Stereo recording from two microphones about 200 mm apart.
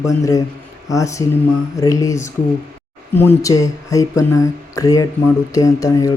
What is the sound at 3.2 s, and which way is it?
Speech, 15° left (ahead or behind).